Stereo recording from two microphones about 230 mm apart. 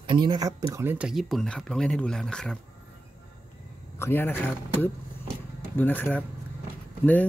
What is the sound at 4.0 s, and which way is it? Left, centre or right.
Speech, centre.